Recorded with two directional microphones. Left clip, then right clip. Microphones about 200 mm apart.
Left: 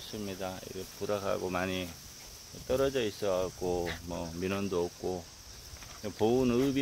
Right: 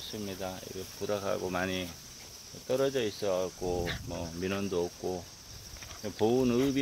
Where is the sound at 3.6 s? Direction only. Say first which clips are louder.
Even; 20° left (ahead or behind).